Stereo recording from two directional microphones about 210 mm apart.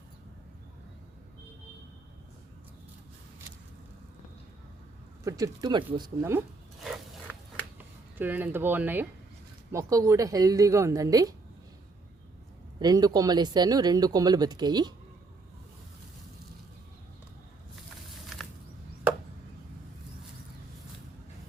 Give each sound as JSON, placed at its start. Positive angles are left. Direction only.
{"t": 5.2, "sound": "speech", "side_deg": -15}
{"t": 8.2, "sound": "speech", "side_deg": -10}
{"t": 12.8, "sound": "speech", "side_deg": -20}